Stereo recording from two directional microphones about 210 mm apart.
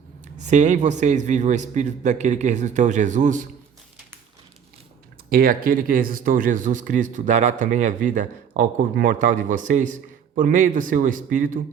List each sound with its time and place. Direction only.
0.3 s speech: 35° right (ahead or behind)
5.3 s speech: 45° right (ahead or behind)